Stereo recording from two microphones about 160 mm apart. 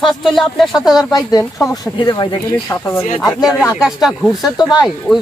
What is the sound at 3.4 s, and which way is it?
Speech, centre (ahead or behind).